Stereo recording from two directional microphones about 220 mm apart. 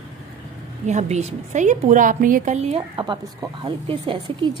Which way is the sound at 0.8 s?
30° right (ahead or behind).